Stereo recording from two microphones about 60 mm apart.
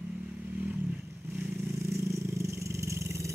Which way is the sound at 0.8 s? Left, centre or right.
Centre.